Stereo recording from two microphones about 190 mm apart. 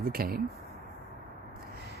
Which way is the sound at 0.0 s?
50° right (ahead or behind).